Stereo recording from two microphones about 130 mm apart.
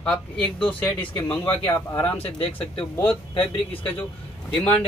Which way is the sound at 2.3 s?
45° left (ahead or behind).